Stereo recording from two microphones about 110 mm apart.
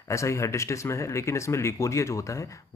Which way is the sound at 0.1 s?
25° left (ahead or behind).